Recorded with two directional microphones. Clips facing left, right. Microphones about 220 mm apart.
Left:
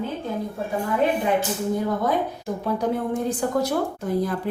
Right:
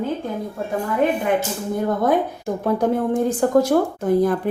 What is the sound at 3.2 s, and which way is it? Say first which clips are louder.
Speech: right 8 dB; 50° right (ahead or behind).